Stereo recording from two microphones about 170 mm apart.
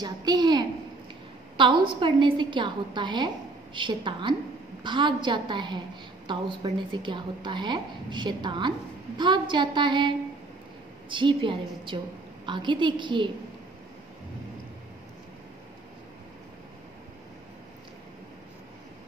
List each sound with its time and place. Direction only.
0.0 s a woman's voice: 25° right (ahead or behind)
2.0 s a woman's voice: 30° right (ahead or behind)